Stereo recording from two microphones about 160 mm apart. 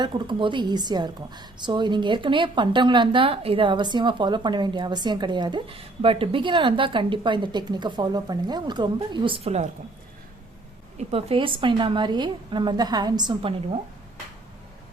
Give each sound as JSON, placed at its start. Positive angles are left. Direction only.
{"t": 0.0, "sound": "a woman's voice", "side_deg": -30}
{"t": 10.9, "sound": "a woman's voice", "side_deg": -35}